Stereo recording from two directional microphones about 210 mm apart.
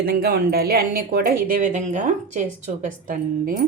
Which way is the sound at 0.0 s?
45° right (ahead or behind).